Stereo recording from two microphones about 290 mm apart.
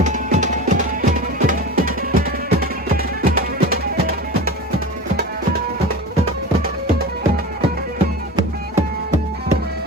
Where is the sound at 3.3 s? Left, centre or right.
Right.